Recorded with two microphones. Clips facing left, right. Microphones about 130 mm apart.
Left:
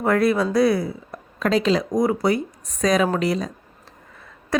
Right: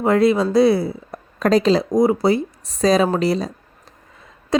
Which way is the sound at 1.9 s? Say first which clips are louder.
Right 4 dB; 25° right (ahead or behind).